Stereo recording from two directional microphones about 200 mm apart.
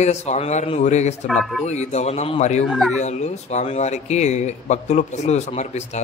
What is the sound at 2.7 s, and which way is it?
Speech, centre (ahead or behind).